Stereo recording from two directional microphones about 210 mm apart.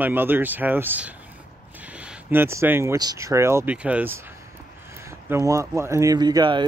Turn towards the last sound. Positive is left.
turn(degrees=-20)  # may be behind; listen again after turning